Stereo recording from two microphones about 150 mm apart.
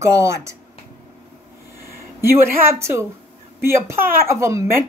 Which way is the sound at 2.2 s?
15° right (ahead or behind).